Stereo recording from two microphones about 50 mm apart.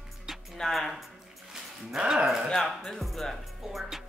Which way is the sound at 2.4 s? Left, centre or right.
Centre.